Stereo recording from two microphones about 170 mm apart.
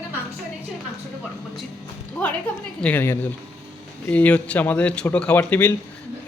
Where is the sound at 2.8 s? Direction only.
10° left (ahead or behind).